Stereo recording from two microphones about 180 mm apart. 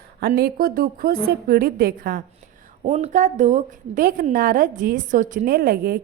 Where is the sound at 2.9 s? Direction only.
35° right (ahead or behind); by 6.0 s 55° right (ahead or behind).